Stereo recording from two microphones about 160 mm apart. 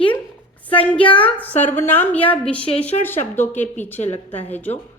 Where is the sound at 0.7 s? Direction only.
10° left (ahead or behind).